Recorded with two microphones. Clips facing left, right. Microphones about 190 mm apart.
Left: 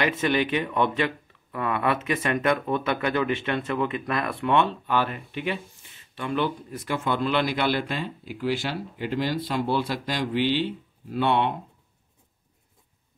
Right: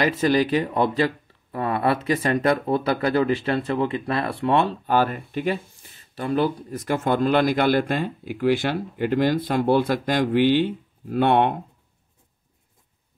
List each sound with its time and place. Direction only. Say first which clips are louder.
0.0 s speech: right 4 dB; 35° right (ahead or behind); by 11.5 s 50° right (ahead or behind)